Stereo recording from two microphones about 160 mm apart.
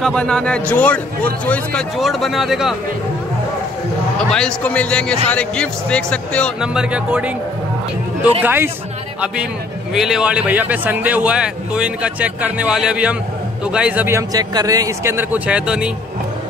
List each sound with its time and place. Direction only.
0.0 s a man's voice: 5° left (ahead or behind)
4.3 s a man's voice: 5° left (ahead or behind)
6.6 s a man's voice: 5° right (ahead or behind)
9.9 s a man's voice: 5° right (ahead or behind)